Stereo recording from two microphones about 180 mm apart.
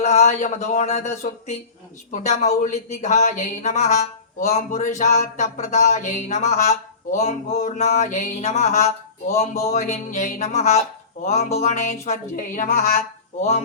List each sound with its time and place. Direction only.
0.0 s speech: 40° left (ahead or behind)